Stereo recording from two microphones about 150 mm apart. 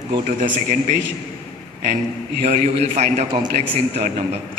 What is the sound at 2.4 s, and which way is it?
A man's voice, 50° right (ahead or behind).